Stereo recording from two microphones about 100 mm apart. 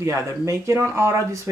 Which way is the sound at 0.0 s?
30° right (ahead or behind).